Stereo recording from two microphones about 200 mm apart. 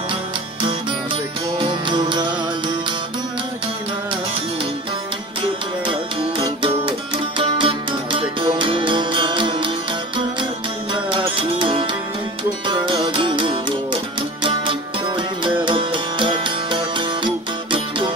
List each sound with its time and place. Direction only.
1.6 s music: 25° right (ahead or behind)
5.9 s music: 25° right (ahead or behind)
10.9 s music: 25° right (ahead or behind)